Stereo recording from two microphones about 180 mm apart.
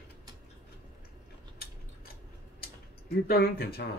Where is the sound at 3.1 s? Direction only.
60° left (ahead or behind).